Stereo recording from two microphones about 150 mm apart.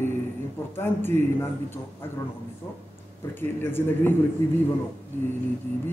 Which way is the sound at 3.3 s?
15° left (ahead or behind).